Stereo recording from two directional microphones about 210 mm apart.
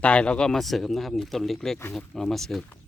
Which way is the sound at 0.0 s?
5° left (ahead or behind).